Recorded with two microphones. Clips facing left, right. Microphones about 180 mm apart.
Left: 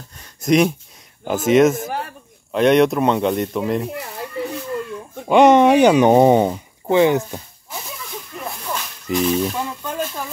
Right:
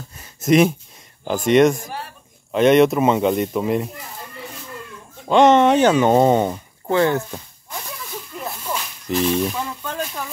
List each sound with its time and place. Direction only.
0.2 s speech: 5° right (ahead or behind)
1.9 s a man's voice: 55° left (ahead or behind)
2.5 s speech: centre (ahead or behind)
5.3 s a sound: 10° left (ahead or behind)